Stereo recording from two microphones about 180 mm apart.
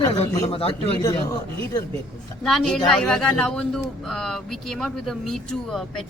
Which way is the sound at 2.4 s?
Centre (ahead or behind).